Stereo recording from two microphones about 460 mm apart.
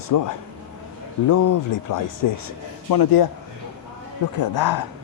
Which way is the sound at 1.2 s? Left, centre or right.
Left.